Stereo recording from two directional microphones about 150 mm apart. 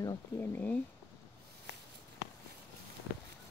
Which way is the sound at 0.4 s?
15° left (ahead or behind).